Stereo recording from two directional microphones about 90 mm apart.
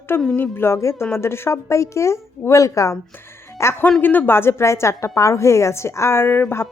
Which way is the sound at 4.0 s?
20° left (ahead or behind).